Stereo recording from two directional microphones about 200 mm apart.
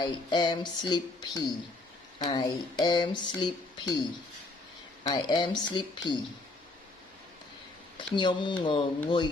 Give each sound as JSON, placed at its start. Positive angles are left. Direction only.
{"t": 0.0, "sound": "speech", "side_deg": 20}
{"t": 5.0, "sound": "speech", "side_deg": 20}
{"t": 7.9, "sound": "speech", "side_deg": 25}